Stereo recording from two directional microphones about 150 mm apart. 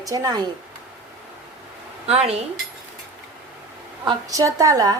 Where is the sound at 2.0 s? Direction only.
45° right (ahead or behind).